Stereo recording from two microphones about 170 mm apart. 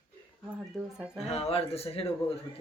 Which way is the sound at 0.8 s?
Centre (ahead or behind).